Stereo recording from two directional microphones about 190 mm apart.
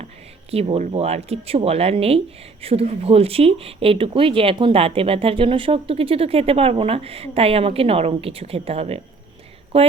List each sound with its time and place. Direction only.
0.5 s speech: 30° right (ahead or behind)